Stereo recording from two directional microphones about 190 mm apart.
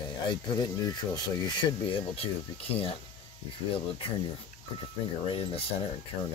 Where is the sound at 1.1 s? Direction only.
20° left (ahead or behind).